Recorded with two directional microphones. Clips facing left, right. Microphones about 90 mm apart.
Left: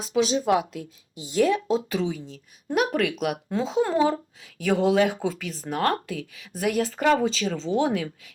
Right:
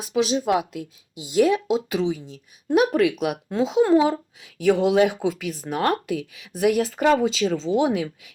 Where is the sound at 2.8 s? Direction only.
20° right (ahead or behind).